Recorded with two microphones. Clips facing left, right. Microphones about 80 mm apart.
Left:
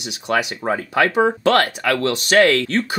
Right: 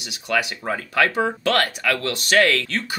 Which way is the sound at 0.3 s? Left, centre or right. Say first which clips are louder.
Left 3 dB; left.